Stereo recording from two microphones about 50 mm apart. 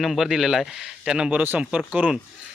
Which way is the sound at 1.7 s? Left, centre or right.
Right.